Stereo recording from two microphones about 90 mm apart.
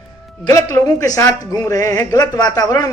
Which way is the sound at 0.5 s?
35° left (ahead or behind).